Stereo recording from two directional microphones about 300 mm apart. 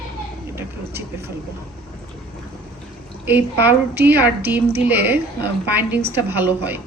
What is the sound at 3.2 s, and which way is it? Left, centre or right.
Speech, centre.